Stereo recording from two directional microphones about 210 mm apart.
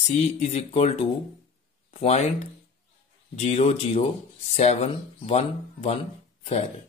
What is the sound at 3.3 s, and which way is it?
Speech, 30° left (ahead or behind).